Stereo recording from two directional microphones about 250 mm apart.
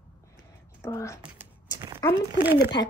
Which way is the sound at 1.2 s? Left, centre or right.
Centre.